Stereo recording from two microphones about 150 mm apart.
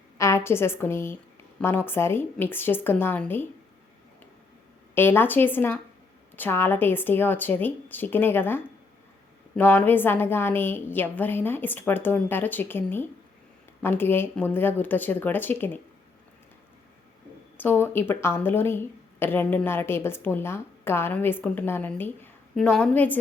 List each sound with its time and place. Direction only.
0.2 s a woman's voice: 20° left (ahead or behind)
4.9 s speech: 15° left (ahead or behind)
17.6 s speech: 15° left (ahead or behind)